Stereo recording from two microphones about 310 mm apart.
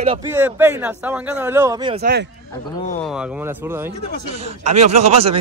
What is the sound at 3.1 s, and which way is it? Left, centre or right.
Speech, centre.